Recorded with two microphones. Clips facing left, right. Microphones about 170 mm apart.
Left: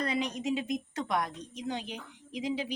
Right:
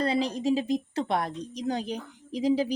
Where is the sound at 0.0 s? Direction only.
30° right (ahead or behind).